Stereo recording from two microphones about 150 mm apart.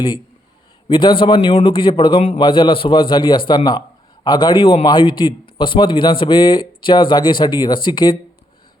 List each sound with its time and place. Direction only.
0.9 s a man's voice: 35° left (ahead or behind)